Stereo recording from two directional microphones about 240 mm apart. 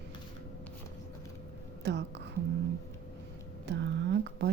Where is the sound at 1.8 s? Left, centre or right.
Right.